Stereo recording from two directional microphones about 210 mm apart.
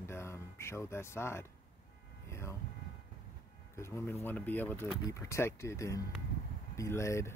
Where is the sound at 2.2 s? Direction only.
15° left (ahead or behind).